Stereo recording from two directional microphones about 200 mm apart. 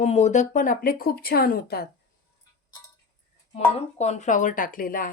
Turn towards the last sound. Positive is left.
turn(degrees=45)  # may be behind; listen again after turning